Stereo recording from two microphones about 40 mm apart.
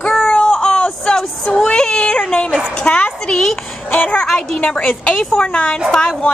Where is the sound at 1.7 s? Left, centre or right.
Centre.